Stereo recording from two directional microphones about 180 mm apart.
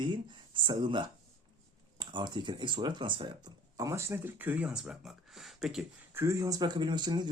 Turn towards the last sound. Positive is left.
turn(degrees=-25)  # may be behind; listen again after turning